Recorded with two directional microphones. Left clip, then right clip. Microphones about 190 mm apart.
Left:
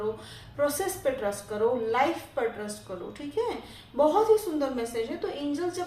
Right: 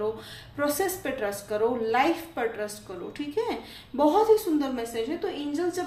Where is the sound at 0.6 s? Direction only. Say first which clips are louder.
Even; 40° right (ahead or behind).